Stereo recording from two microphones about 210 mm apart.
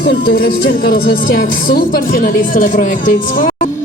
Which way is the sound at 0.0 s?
50° left (ahead or behind).